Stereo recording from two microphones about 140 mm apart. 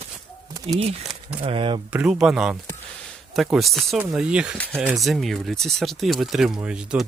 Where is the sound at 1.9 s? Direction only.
10° right (ahead or behind).